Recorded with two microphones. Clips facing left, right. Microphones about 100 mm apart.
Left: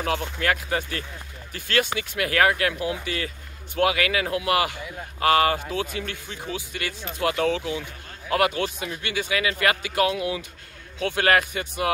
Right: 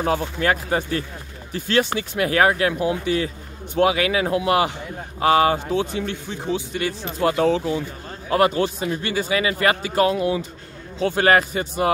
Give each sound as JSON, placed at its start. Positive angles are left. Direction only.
{"t": 0.0, "sound": "speech", "side_deg": -30}